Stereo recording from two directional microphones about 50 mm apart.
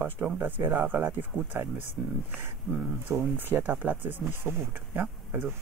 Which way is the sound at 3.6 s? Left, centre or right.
Right.